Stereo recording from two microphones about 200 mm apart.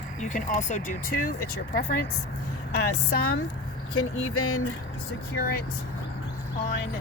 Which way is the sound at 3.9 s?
90° left.